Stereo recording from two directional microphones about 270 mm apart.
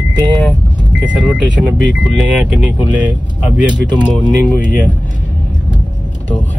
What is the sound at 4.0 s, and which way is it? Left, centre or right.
Speech, centre.